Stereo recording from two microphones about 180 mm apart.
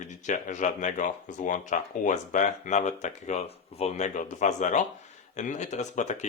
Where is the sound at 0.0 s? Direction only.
45° left (ahead or behind).